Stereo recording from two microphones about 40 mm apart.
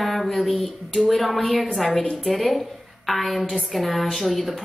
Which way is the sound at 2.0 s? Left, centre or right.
Left.